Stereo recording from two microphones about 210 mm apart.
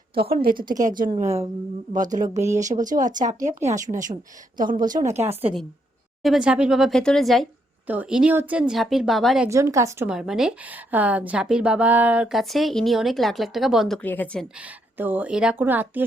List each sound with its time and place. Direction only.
0.2 s a woman's voice: 45° right (ahead or behind); by 5.5 s 30° right (ahead or behind)
6.2 s a woman's voice: 5° right (ahead or behind)
9.5 s a woman's voice: 15° right (ahead or behind); by 14.4 s 10° left (ahead or behind)
14.6 s speech: 10° right (ahead or behind)